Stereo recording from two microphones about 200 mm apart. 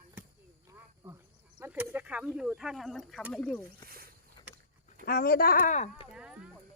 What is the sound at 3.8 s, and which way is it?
Speech, 50° right (ahead or behind).